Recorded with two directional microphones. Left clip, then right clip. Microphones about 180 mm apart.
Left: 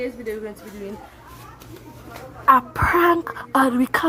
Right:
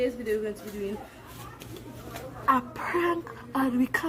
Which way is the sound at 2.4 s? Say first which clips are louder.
Left 10 dB; 40° left (ahead or behind).